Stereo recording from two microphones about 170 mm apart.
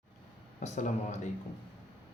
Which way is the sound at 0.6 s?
45° left (ahead or behind).